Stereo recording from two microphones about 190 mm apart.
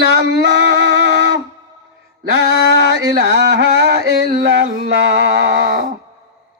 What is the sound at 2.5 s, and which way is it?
Speech, 60° left (ahead or behind).